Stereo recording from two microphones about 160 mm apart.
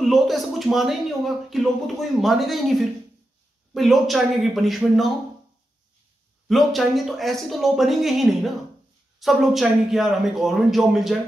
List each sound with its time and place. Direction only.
0.0 s speech: centre (ahead or behind)
6.4 s speech: centre (ahead or behind)